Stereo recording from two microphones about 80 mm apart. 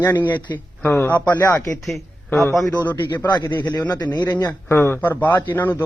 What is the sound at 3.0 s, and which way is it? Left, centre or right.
Speech, left.